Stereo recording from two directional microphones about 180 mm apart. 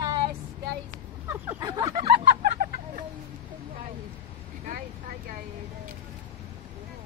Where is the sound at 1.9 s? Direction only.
35° right (ahead or behind).